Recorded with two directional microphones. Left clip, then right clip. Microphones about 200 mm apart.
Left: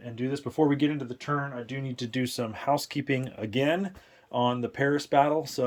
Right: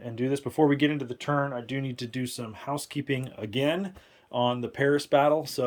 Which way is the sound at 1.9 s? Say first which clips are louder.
Left 1 dB; centre (ahead or behind).